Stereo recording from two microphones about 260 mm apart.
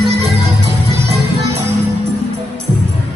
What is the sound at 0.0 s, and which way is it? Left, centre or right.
Music, right.